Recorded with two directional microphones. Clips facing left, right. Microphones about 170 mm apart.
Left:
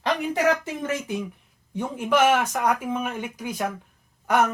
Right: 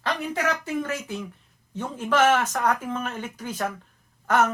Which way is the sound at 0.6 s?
20° left (ahead or behind).